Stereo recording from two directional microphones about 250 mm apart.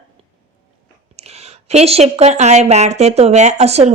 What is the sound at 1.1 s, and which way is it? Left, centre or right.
Speech, right.